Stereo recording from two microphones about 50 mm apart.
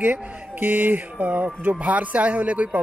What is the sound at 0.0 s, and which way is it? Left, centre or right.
Speech, right.